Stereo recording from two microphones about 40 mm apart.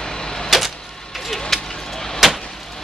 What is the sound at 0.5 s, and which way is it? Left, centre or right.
Vehicle, centre.